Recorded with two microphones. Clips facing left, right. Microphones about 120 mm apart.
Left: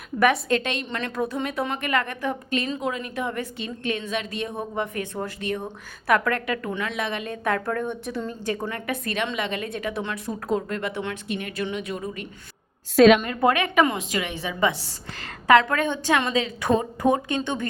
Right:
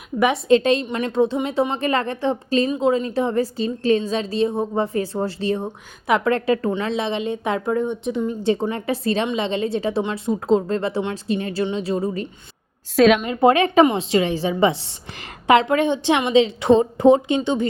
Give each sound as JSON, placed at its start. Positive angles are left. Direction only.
{"t": 0.2, "sound": "a woman's voice", "side_deg": -25}
{"t": 0.9, "sound": "a woman's voice", "side_deg": -20}
{"t": 2.6, "sound": "a woman's voice", "side_deg": -20}
{"t": 2.9, "sound": "a woman's voice", "side_deg": -35}
{"t": 13.0, "sound": "a woman's voice", "side_deg": 0}
{"t": 13.2, "sound": "a woman's voice", "side_deg": -20}